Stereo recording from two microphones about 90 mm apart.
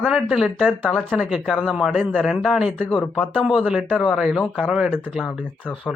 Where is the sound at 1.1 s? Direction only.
10° right (ahead or behind).